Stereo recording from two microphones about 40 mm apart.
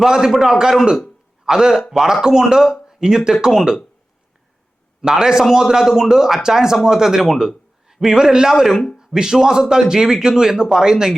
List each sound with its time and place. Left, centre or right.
0.0 s a man's voice: centre
5.0 s a man's voice: centre